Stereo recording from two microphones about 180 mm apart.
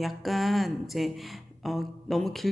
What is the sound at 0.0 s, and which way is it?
Speech, centre (ahead or behind).